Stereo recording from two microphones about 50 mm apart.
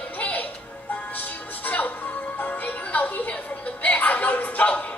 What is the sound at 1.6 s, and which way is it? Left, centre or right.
Music, left.